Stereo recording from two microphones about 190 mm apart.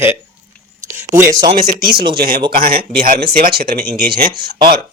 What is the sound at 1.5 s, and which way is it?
Speech, 50° right (ahead or behind).